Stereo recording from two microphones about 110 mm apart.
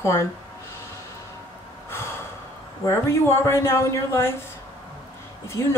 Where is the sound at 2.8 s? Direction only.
25° left (ahead or behind).